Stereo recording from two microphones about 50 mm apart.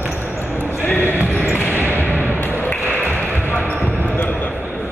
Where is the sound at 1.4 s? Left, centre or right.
Left.